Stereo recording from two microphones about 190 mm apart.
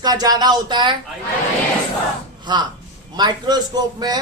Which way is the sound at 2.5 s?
25° right (ahead or behind).